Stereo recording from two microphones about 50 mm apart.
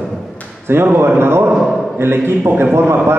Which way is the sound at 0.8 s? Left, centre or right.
Right.